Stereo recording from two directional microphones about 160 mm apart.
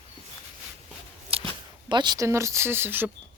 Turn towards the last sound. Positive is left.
turn(degrees=-15)  # may be behind; listen again after turning